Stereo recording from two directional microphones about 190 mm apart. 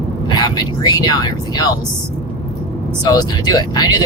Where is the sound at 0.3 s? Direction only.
20° left (ahead or behind).